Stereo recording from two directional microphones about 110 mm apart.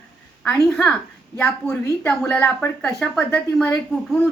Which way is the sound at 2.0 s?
10° left (ahead or behind).